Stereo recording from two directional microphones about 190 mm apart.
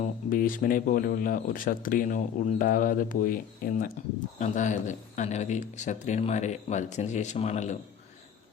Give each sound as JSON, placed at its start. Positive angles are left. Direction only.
{"t": 0.0, "sound": "speech", "side_deg": 45}